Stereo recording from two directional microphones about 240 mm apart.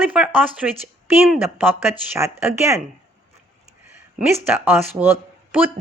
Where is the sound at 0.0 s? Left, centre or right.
Centre.